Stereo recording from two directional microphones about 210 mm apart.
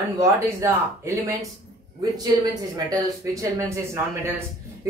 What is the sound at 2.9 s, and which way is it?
Speech, 15° right (ahead or behind).